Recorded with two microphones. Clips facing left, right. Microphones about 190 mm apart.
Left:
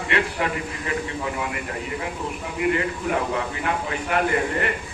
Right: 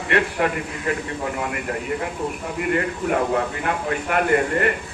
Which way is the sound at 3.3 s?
50° right (ahead or behind).